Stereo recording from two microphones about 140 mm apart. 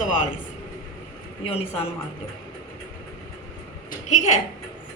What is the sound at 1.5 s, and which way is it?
Speech, 45° left (ahead or behind).